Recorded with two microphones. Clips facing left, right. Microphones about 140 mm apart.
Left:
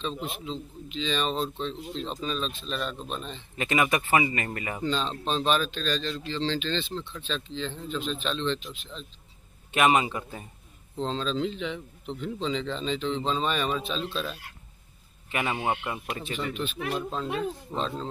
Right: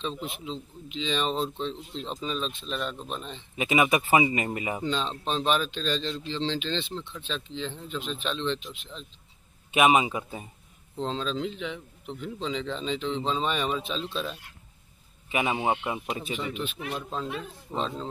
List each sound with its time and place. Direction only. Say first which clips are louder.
0.5 s speech: left 1 dB; 15° right (ahead or behind)
9.7 s speech: right 1 dB; 10° right (ahead or behind)
16.9 s speech: left 2 dB; centre (ahead or behind)
17.6 s speech: even; 15° right (ahead or behind)